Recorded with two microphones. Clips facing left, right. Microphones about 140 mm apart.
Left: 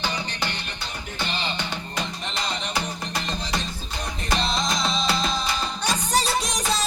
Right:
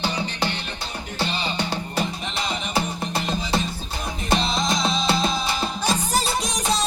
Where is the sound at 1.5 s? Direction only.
35° right (ahead or behind).